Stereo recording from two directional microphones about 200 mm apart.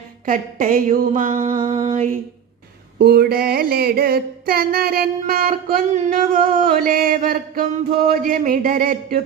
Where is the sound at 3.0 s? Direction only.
50° right (ahead or behind).